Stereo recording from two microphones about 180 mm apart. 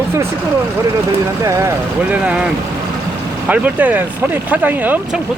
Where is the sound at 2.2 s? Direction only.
5° right (ahead or behind).